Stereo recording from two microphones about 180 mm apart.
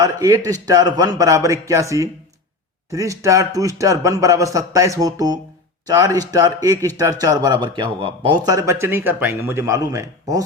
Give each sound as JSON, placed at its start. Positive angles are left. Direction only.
{"t": 0.0, "sound": "a man's voice", "side_deg": -20}